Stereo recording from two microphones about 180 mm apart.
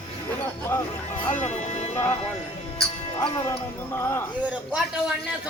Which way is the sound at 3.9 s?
15° left (ahead or behind).